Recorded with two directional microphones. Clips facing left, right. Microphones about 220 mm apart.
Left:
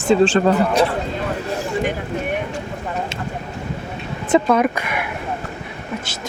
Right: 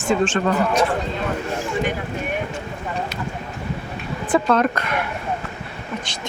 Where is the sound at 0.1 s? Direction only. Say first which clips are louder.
Left 5 dB; 30° left (ahead or behind).